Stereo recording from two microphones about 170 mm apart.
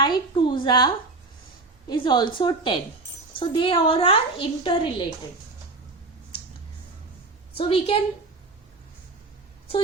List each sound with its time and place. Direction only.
0.0 s a woman's voice: 25° left (ahead or behind)
1.9 s a woman's voice: 25° left (ahead or behind)
7.5 s a woman's voice: 35° left (ahead or behind)